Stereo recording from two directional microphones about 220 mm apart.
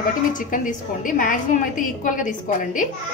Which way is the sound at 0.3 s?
35° left (ahead or behind).